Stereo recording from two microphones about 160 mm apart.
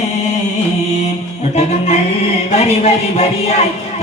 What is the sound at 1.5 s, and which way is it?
Speech, 40° left (ahead or behind).